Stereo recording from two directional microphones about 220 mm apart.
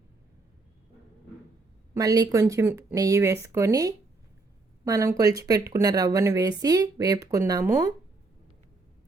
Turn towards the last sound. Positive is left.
turn(degrees=-15)  # may be behind; listen again after turning